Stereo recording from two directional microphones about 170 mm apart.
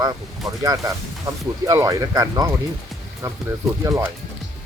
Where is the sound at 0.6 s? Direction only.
20° right (ahead or behind).